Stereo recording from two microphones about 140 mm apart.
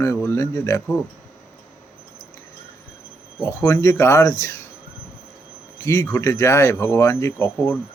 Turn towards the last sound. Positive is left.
turn(degrees=20)  # may be behind; listen again after turning